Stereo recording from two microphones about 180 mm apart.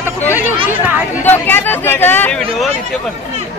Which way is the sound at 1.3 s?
10° left (ahead or behind).